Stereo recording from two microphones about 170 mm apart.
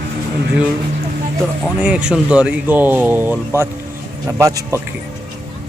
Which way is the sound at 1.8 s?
5° right (ahead or behind).